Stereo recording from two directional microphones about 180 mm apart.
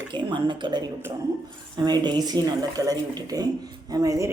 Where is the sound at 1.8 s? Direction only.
25° right (ahead or behind).